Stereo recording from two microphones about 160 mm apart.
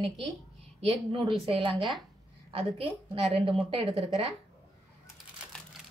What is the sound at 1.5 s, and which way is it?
Speech, 35° right (ahead or behind).